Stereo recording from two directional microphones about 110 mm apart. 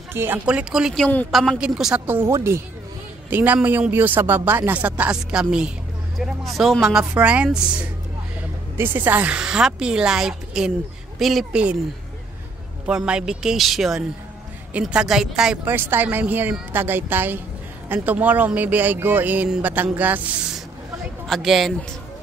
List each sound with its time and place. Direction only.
0.1 s speech: 20° right (ahead or behind)
0.5 s speech: 10° right (ahead or behind)
2.0 s speech: 15° right (ahead or behind); by 11.6 s centre (ahead or behind)
12.8 s speech: 10° right (ahead or behind)
15.7 s speech: 20° right (ahead or behind)
21.3 s speech: centre (ahead or behind)